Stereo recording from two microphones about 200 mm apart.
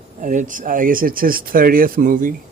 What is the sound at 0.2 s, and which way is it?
A man's voice, 40° right (ahead or behind).